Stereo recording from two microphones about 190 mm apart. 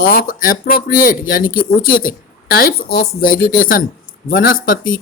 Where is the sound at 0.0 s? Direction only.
50° left (ahead or behind).